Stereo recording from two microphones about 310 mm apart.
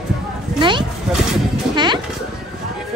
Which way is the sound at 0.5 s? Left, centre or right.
Centre.